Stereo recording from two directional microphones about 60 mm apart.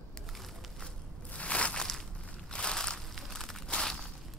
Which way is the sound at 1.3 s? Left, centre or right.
Left.